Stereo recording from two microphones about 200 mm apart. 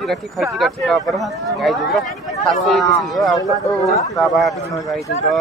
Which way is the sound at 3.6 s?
15° left (ahead or behind).